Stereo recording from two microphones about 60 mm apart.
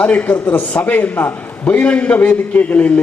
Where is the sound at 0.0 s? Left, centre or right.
Left.